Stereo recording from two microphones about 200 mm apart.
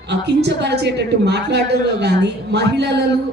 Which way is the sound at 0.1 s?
55° right (ahead or behind).